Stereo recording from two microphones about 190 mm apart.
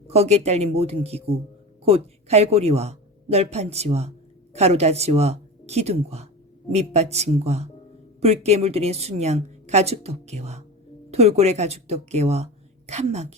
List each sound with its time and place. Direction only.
0.1 s a woman's voice: 35° right (ahead or behind)